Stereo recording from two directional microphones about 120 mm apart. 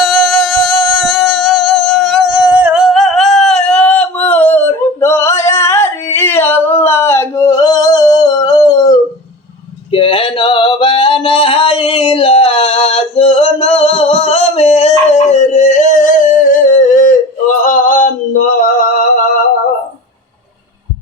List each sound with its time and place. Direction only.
0.0 s music: centre (ahead or behind); by 9.0 s 35° left (ahead or behind)
9.9 s a sound: 50° left (ahead or behind); by 17.2 s 90° left
17.7 s male singing: 90° left